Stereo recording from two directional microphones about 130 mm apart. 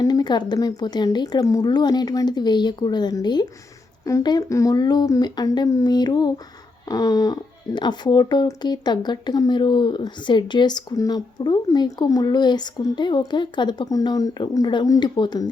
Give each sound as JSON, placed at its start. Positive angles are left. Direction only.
{"t": 0.0, "sound": "speech", "side_deg": 30}